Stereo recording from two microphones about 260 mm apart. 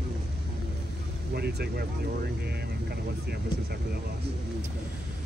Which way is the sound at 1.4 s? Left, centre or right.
Right.